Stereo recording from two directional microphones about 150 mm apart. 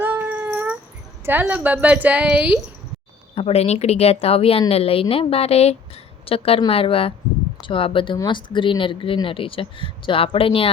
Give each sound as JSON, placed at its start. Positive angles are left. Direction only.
{"t": 0.0, "sound": "a sound", "side_deg": -10}
{"t": 1.2, "sound": "a woman's voice", "side_deg": -10}
{"t": 3.3, "sound": "speech", "side_deg": 45}